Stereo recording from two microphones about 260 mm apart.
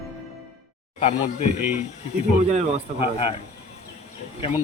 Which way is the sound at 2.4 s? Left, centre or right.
Right.